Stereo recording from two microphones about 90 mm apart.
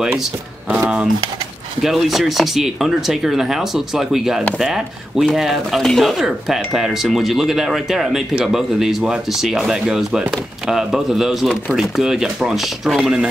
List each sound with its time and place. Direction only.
0.7 s speech: 15° right (ahead or behind)
1.8 s speech: centre (ahead or behind)